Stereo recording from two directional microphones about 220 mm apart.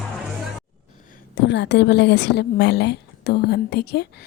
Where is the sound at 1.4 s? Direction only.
50° left (ahead or behind).